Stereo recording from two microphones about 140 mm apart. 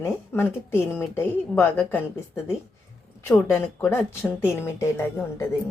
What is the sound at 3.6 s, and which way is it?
Speech, 15° left (ahead or behind).